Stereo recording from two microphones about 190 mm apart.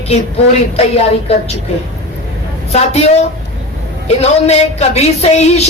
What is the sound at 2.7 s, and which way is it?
A woman's voice, 35° left (ahead or behind).